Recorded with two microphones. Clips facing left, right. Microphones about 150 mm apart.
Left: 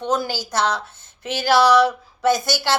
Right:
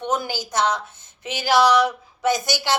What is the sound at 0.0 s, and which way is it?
A woman's voice, 20° right (ahead or behind).